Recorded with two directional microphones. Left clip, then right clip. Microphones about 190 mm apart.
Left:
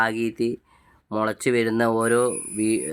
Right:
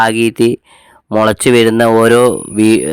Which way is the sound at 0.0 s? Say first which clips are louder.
Right 12 dB; 50° right (ahead or behind).